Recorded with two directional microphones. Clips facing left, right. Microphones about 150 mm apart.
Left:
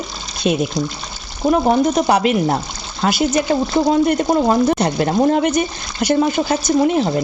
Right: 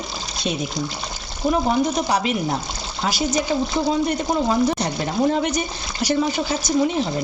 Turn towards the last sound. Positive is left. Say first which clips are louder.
# left 5 dB
turn(degrees=55)  # may be behind; listen again after turning